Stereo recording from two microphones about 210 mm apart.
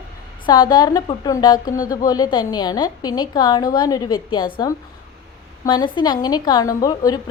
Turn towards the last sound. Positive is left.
turn(degrees=15)  # may be behind; listen again after turning